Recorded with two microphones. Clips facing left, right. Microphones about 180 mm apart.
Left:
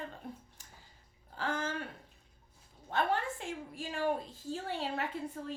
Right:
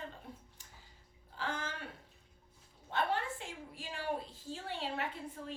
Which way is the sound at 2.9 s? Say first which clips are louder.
Left 2 dB; 45° left (ahead or behind).